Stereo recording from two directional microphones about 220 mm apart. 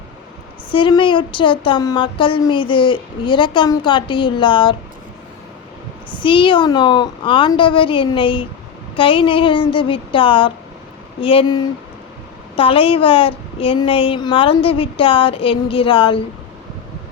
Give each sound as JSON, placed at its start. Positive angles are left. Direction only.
{"t": 0.7, "sound": "speech", "side_deg": 20}
{"t": 6.2, "sound": "speech", "side_deg": 25}